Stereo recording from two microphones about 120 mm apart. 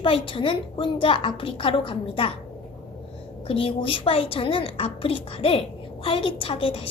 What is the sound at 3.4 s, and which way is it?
A woman's voice, 50° left (ahead or behind).